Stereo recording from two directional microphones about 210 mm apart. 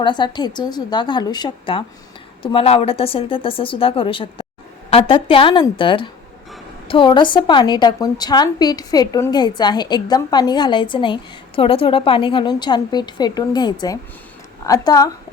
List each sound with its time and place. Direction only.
0.0 s a woman's voice: 20° left (ahead or behind)